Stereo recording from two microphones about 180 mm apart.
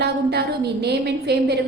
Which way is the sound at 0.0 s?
65° right (ahead or behind).